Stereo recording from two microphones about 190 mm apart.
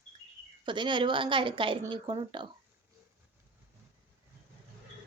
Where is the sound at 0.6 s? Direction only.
25° right (ahead or behind).